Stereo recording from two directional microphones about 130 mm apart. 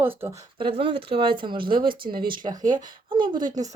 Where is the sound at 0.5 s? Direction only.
40° right (ahead or behind).